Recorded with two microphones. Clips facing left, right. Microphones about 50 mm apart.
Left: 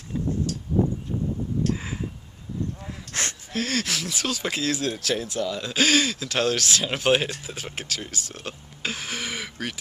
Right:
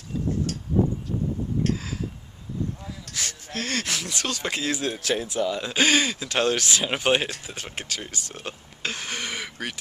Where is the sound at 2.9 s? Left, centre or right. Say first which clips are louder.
Left 3 dB; left.